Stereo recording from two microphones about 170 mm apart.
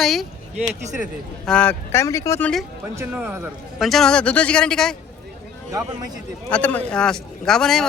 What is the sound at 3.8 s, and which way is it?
Speech, centre (ahead or behind).